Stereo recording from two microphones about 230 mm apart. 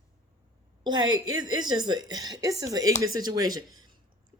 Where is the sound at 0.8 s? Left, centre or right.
Centre.